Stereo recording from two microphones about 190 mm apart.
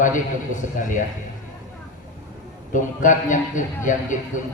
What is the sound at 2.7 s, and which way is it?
A man's voice, 40° left (ahead or behind).